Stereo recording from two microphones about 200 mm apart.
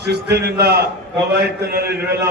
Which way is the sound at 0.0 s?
55° right (ahead or behind).